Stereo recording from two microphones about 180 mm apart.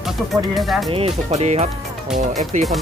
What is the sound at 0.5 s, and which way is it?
Speech, centre (ahead or behind).